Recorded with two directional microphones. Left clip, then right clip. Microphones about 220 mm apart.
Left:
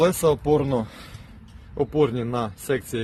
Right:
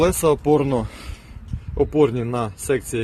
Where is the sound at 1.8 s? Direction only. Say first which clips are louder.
Right 4 dB; centre (ahead or behind).